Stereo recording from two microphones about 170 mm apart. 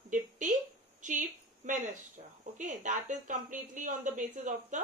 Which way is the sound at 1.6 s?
45° right (ahead or behind).